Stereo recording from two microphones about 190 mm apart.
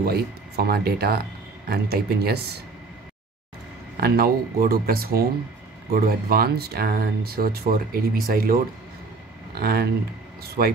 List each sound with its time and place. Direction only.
0.0 s speech: 55° right (ahead or behind)
3.9 s speech: 55° right (ahead or behind)
9.6 s speech: 55° right (ahead or behind)